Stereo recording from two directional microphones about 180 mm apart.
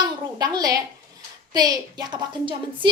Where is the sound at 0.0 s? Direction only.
25° right (ahead or behind).